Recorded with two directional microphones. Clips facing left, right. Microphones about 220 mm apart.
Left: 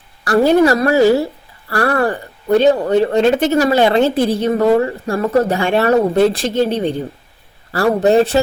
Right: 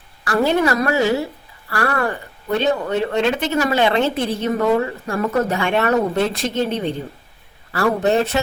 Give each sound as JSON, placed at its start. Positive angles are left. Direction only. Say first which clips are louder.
{"t": 0.3, "sound": "a woman's voice", "louder": "left 6 dB", "side_deg": 35}